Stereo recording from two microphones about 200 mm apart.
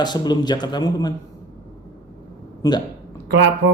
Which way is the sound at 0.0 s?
20° left (ahead or behind).